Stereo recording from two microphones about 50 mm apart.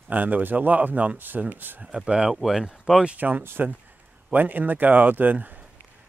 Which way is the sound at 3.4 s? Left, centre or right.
Right.